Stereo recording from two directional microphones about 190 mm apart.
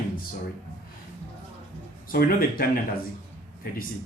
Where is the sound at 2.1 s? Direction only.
50° left (ahead or behind).